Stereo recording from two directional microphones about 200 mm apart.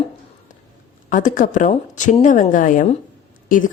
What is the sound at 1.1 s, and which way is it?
Speech, 40° left (ahead or behind).